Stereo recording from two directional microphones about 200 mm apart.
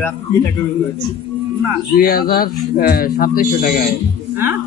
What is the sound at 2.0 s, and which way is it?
Speech, 50° left (ahead or behind).